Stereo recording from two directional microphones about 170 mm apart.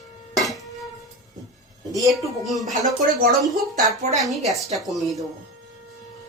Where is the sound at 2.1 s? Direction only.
Centre (ahead or behind).